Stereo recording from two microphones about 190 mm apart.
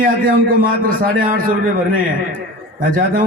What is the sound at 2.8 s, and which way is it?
Speech, 45° right (ahead or behind).